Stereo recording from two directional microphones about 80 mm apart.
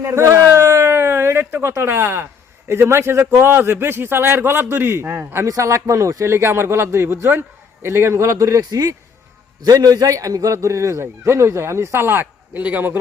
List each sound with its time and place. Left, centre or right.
0.0 s a man's voice: right